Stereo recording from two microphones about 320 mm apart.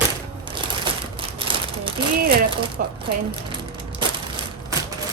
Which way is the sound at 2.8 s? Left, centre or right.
Right.